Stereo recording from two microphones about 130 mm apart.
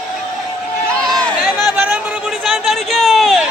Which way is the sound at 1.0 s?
Centre (ahead or behind).